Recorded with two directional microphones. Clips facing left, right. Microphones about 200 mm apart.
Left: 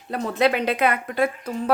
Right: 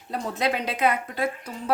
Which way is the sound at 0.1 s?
60° left (ahead or behind).